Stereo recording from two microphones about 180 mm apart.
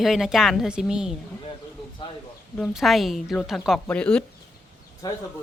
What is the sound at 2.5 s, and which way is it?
A woman's voice, centre (ahead or behind).